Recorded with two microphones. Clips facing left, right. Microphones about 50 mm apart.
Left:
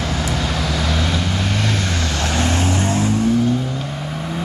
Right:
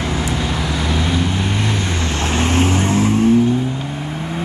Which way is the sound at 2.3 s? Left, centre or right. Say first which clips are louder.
Right 4 dB; right.